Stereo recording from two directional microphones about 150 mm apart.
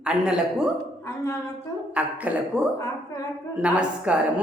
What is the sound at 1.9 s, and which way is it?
A woman's voice, 10° right (ahead or behind).